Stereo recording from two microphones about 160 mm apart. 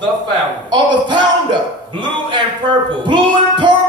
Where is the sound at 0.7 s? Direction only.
30° right (ahead or behind).